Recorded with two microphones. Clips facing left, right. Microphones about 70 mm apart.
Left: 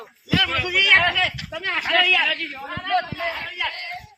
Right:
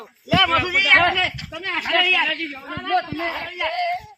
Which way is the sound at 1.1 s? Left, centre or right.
Centre.